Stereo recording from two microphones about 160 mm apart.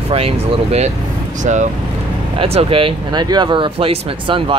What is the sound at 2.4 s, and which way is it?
Speech, 35° right (ahead or behind).